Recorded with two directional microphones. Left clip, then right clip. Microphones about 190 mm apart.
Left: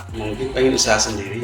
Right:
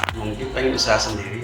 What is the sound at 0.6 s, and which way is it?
Speech, 40° left (ahead or behind).